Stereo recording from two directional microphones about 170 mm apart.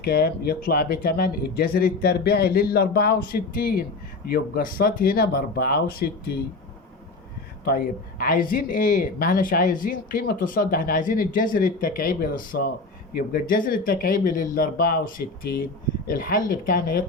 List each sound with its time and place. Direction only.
0.0 s speech: 65° left (ahead or behind)
7.6 s speech: 60° left (ahead or behind)
15.5 s speech: 70° left (ahead or behind)
16.0 s speech: 55° left (ahead or behind)